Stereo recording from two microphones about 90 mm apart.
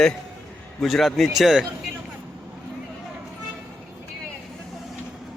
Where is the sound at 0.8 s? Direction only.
Centre (ahead or behind).